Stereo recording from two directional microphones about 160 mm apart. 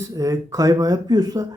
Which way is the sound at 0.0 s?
20° right (ahead or behind).